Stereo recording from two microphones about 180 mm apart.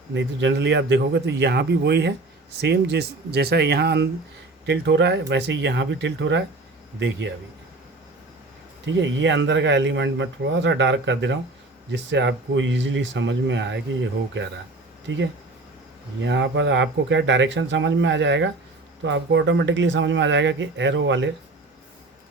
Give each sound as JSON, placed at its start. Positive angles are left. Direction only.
{"t": 0.1, "sound": "a man's voice", "side_deg": -90}
{"t": 8.9, "sound": "speech", "side_deg": -90}
{"t": 15.0, "sound": "speech", "side_deg": -90}